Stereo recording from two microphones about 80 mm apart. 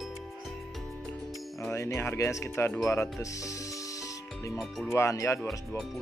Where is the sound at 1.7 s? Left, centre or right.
Left.